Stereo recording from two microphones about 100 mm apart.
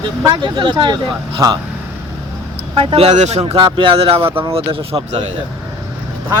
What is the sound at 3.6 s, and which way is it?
Speech, 65° right (ahead or behind).